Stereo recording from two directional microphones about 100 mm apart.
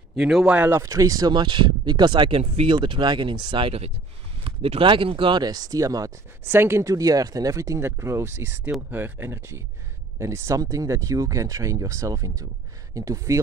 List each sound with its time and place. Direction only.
0.1 s speech: 5° right (ahead or behind)
0.6 s speech: 25° right (ahead or behind); by 5.4 s 60° right (ahead or behind)
5.4 s speech: 40° right (ahead or behind)
6.4 s speech: 25° right (ahead or behind)